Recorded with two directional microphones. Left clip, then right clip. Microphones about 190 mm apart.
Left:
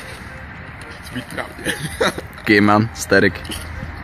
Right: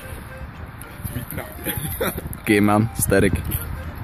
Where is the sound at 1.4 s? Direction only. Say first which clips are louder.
Left 7 dB; 35° left (ahead or behind).